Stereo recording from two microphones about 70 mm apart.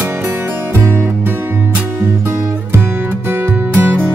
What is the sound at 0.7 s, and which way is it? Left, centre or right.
Music, right.